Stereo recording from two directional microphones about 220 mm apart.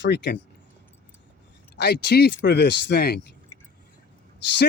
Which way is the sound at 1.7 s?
50° left (ahead or behind).